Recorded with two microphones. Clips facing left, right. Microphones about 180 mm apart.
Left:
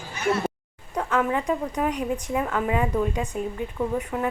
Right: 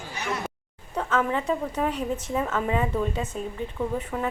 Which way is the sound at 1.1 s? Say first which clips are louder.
Left 1 dB; 15° left (ahead or behind).